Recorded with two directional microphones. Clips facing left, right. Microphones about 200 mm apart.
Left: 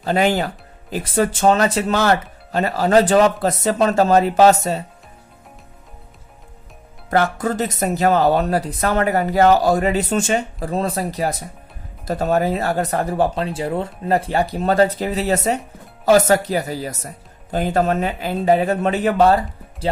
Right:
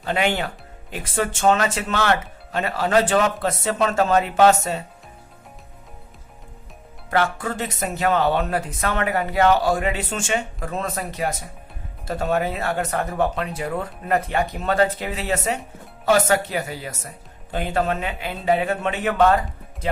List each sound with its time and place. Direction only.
0.0 s speech: 40° left (ahead or behind)
7.1 s speech: 40° left (ahead or behind)